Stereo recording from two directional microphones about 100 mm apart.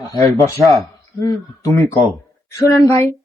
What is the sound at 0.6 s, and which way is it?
Speech, centre (ahead or behind).